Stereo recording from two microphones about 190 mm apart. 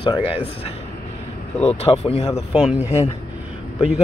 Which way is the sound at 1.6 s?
30° left (ahead or behind).